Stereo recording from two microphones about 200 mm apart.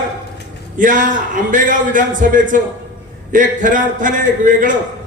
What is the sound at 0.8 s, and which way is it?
A man's voice, 40° right (ahead or behind).